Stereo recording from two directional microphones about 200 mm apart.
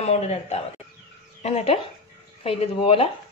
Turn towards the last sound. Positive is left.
turn(degrees=25)  # may be behind; listen again after turning